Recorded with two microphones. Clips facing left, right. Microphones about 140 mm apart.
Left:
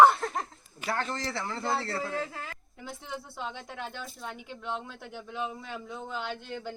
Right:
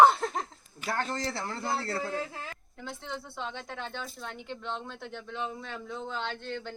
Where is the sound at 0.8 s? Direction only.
40° right (ahead or behind).